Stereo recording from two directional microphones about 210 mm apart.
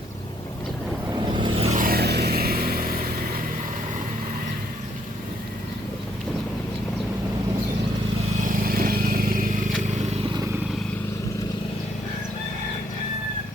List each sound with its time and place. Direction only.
1.3 s vehicle: 20° right (ahead or behind); by 3.1 s 45° right (ahead or behind)
8.4 s vehicle: 45° right (ahead or behind)